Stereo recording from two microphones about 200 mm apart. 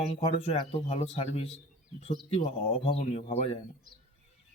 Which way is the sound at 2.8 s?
30° left (ahead or behind).